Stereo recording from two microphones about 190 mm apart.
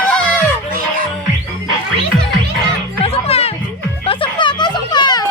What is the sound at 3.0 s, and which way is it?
Music, 30° left (ahead or behind).